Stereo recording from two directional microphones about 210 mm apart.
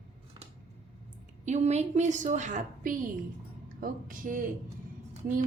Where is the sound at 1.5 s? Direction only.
35° right (ahead or behind).